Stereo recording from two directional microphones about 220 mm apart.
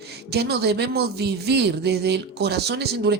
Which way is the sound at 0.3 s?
45° right (ahead or behind).